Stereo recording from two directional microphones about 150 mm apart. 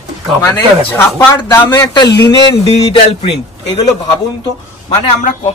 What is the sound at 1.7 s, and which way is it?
Speech, 30° left (ahead or behind).